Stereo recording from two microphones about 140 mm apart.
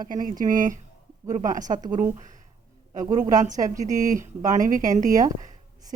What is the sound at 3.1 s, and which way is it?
A woman's voice, 60° right (ahead or behind).